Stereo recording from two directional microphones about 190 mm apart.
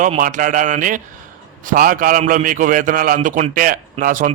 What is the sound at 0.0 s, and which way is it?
A man's voice, 40° right (ahead or behind).